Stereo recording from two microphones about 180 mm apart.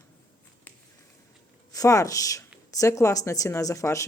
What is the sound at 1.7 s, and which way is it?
Speech, 20° left (ahead or behind).